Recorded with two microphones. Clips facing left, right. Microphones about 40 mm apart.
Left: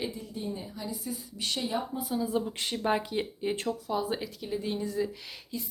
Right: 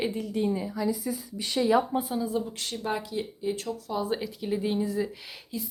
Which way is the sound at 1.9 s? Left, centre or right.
Right.